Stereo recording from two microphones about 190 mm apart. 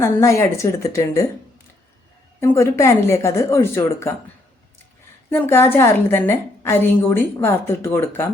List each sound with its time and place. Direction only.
0.0 s a woman's voice: 15° left (ahead or behind)
2.4 s a woman's voice: 15° left (ahead or behind)
5.3 s a woman's voice: 10° left (ahead or behind)